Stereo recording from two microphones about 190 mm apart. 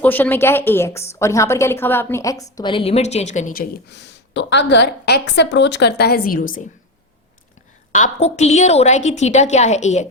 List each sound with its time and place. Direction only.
0.0 s a woman's voice: 10° left (ahead or behind); by 6.7 s 45° left (ahead or behind)
7.9 s a woman's voice: 40° left (ahead or behind)